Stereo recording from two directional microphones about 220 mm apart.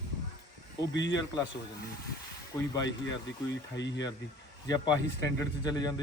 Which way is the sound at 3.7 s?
55° left (ahead or behind).